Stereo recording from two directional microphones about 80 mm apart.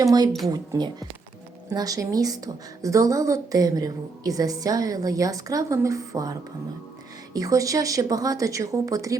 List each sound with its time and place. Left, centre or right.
0.0 s a woman's voice: right
7.3 s a woman's voice: right